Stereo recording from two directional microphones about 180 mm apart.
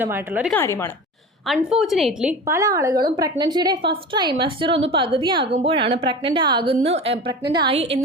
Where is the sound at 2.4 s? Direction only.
15° right (ahead or behind).